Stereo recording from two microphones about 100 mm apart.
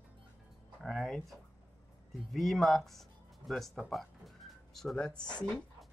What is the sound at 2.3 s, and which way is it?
Speech, centre (ahead or behind).